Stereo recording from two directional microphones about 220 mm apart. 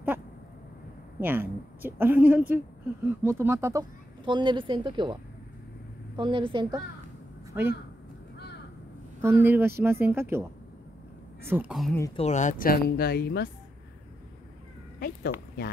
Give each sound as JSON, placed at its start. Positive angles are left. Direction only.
{"t": 1.2, "sound": "a woman's voice", "side_deg": -10}
{"t": 7.5, "sound": "a woman's voice", "side_deg": -10}
{"t": 9.2, "sound": "a woman's voice", "side_deg": -10}
{"t": 11.4, "sound": "a woman's voice", "side_deg": -10}
{"t": 12.2, "sound": "speech", "side_deg": 30}
{"t": 15.0, "sound": "speech", "side_deg": 40}